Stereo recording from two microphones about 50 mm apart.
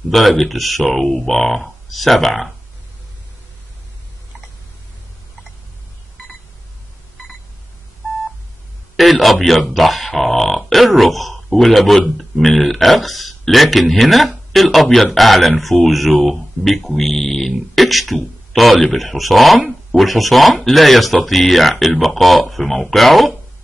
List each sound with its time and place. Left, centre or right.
0.1 s speech: centre
8.9 s speech: centre